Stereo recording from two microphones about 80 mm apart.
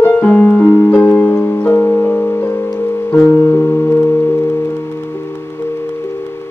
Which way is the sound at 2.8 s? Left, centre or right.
Left.